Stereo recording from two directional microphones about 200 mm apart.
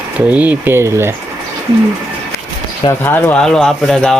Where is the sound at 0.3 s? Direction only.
10° right (ahead or behind).